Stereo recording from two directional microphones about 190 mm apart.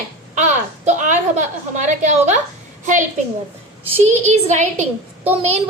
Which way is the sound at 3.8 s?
35° right (ahead or behind).